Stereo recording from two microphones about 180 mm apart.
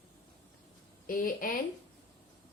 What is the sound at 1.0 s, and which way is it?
Speech, 50° left (ahead or behind).